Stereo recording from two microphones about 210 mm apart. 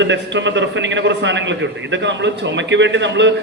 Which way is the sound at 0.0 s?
60° right (ahead or behind).